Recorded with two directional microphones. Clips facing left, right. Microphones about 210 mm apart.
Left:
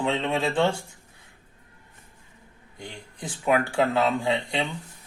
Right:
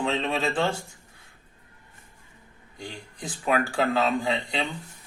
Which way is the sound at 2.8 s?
20° left (ahead or behind).